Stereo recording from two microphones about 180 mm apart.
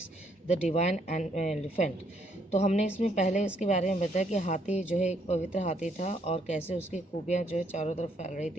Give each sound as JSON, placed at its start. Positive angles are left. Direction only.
{"t": 0.4, "sound": "speech", "side_deg": 35}